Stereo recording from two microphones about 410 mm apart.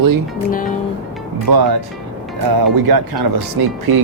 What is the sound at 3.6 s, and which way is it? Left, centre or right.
Speech, right.